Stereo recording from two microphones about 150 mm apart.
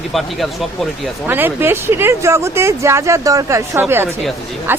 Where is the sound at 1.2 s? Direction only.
15° right (ahead or behind).